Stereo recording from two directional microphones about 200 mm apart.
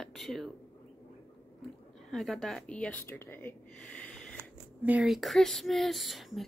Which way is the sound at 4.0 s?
5° left (ahead or behind).